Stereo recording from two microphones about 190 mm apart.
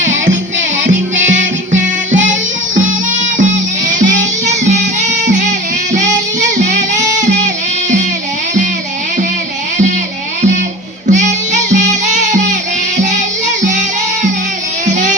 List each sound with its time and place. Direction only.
1.4 s music: 40° right (ahead or behind)
3.8 s music: 40° right (ahead or behind)
11.0 s music: 40° right (ahead or behind)
13.7 s music: 40° right (ahead or behind)